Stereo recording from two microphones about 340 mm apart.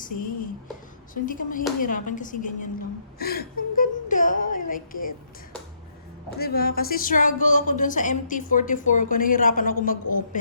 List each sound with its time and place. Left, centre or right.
0.0 s a woman's voice: left
3.2 s a sound: left
6.4 s a woman's voice: left